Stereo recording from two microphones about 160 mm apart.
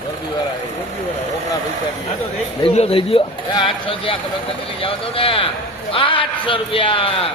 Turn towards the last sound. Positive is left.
turn(degrees=35)  # may be behind; listen again after turning